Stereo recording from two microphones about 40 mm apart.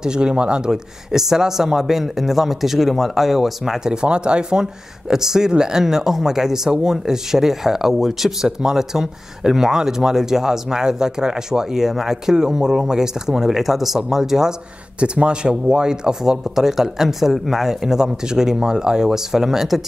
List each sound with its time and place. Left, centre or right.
0.0 s speech: right
1.1 s speech: centre
15.0 s speech: right; by 19.8 s centre